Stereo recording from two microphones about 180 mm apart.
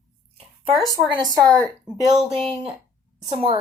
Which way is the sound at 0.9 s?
20° right (ahead or behind).